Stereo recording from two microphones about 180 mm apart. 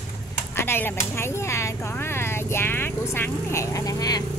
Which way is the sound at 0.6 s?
10° left (ahead or behind).